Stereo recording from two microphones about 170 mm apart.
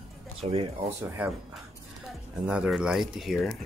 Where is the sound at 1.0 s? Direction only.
15° right (ahead or behind).